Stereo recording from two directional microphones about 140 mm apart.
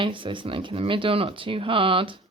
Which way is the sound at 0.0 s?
35° right (ahead or behind).